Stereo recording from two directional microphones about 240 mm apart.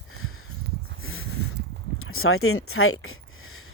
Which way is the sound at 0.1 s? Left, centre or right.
Left.